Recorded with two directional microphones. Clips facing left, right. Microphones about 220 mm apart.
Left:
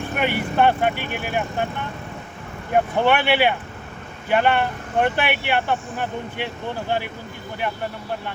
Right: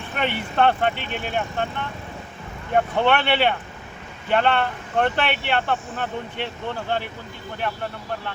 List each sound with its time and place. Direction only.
0.2 s speech: 10° left (ahead or behind)
2.7 s speech: 10° left (ahead or behind)